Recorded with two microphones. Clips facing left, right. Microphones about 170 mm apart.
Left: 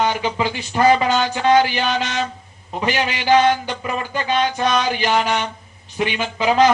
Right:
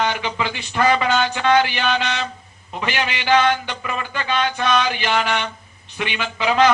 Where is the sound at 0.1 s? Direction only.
40° left (ahead or behind).